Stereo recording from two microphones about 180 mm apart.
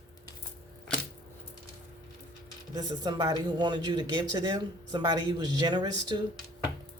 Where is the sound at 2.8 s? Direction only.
20° right (ahead or behind).